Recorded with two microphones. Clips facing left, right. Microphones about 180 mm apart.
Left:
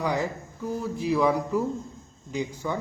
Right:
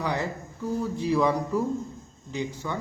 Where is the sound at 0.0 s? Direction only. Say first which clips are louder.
Left 2 dB; 15° left (ahead or behind).